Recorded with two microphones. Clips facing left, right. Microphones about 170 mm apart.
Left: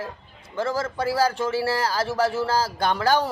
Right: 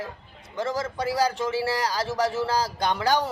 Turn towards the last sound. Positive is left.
turn(degrees=-20)  # may be behind; listen again after turning